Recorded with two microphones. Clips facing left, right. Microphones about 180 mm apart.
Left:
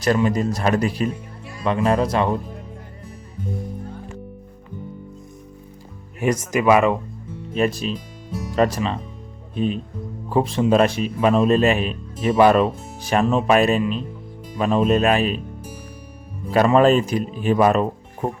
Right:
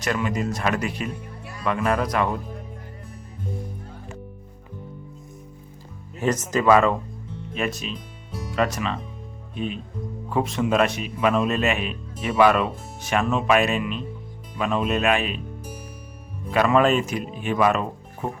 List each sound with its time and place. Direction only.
0.0 s speech: 35° left (ahead or behind)
6.1 s speech: 10° left (ahead or behind)
7.5 s speech: 35° left (ahead or behind)
7.9 s speech: centre (ahead or behind)
8.5 s speech: 35° left (ahead or behind)
10.2 s speech: 30° left (ahead or behind)
16.5 s speech: 35° left (ahead or behind)